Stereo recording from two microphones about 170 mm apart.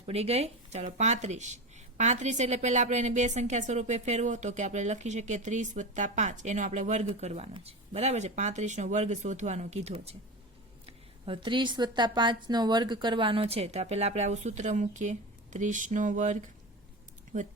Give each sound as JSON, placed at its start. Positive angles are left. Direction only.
{"t": 0.0, "sound": "a woman's voice", "side_deg": -35}